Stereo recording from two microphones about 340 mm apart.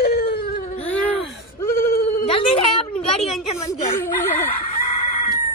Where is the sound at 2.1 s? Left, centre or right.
Centre.